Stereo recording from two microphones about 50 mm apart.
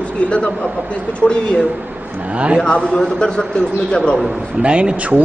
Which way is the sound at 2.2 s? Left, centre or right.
Right.